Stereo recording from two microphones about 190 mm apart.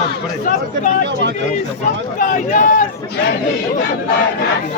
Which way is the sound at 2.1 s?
45° left (ahead or behind).